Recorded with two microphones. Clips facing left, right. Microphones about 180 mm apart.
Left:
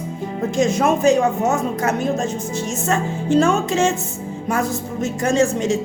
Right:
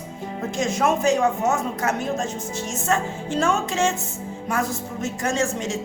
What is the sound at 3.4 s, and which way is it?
Speech, 20° left (ahead or behind).